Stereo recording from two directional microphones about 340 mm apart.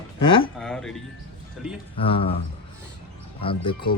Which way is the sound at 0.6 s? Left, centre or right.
Centre.